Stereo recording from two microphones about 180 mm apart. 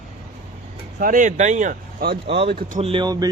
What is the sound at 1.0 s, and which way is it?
Speech, 50° right (ahead or behind).